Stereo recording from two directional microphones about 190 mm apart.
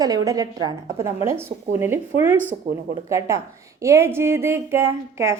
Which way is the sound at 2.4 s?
45° right (ahead or behind).